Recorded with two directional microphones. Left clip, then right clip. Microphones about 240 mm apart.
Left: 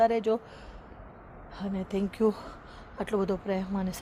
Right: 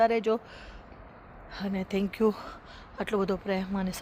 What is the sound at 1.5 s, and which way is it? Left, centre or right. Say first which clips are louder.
A woman's voice: right 1 dB; centre.